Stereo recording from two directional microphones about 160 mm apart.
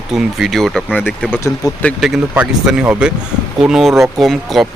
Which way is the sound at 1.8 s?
Centre (ahead or behind).